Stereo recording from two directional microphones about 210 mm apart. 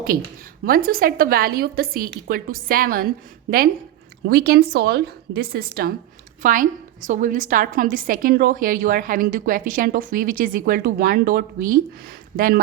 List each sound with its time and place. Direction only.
0.6 s a woman's voice: 45° right (ahead or behind)
4.3 s a woman's voice: 50° right (ahead or behind)